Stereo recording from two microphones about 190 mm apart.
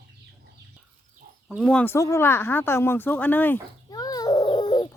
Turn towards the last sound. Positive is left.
turn(degrees=20)  # may be behind; listen again after turning